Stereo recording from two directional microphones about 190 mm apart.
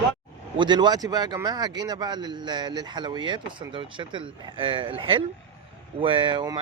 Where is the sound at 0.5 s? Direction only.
25° right (ahead or behind).